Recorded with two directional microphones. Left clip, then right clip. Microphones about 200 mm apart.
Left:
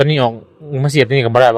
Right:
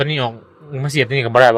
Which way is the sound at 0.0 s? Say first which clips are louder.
Left 6 dB; 25° left (ahead or behind).